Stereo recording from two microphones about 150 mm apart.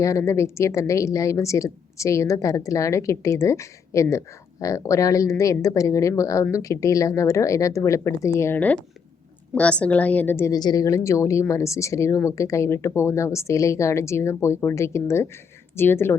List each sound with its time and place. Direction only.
0.0 s a woman's voice: 20° left (ahead or behind)